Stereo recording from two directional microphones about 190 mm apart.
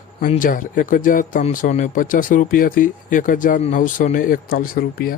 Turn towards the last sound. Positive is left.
turn(degrees=50)  # may be behind; listen again after turning